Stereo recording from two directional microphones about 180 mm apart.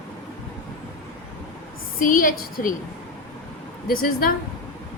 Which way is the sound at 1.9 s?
50° left (ahead or behind).